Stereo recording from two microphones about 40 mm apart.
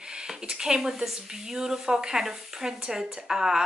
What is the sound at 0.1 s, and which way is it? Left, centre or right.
A woman's voice, centre.